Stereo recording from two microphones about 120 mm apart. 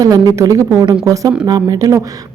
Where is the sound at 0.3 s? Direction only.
25° right (ahead or behind).